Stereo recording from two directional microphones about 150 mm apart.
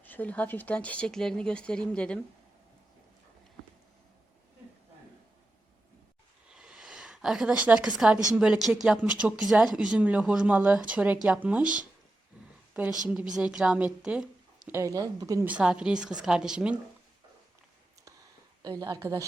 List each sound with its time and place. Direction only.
0.0 s speech: 10° left (ahead or behind)
6.6 s a sound: 5° right (ahead or behind)
8.4 s speech: 5° right (ahead or behind)
12.4 s a sound: 5° right (ahead or behind)
12.7 s speech: 5° right (ahead or behind)
14.7 s speech: 20° right (ahead or behind)
15.4 s speech: 5° right (ahead or behind)
18.6 s speech: 25° right (ahead or behind)